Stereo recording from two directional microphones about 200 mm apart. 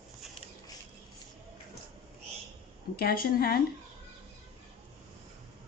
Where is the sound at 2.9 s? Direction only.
50° left (ahead or behind).